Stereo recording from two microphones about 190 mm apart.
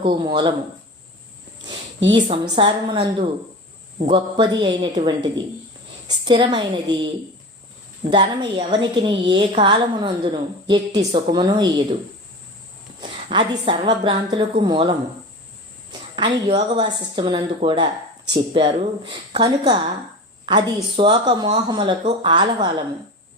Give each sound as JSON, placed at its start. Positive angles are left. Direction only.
{"t": 0.0, "sound": "a woman's voice", "side_deg": -25}
{"t": 2.0, "sound": "a woman's voice", "side_deg": -25}
{"t": 8.1, "sound": "a woman's voice", "side_deg": -25}
{"t": 13.0, "sound": "a woman's voice", "side_deg": -25}
{"t": 15.9, "sound": "cricket", "side_deg": -25}
{"t": 16.5, "sound": "a woman's voice", "side_deg": -25}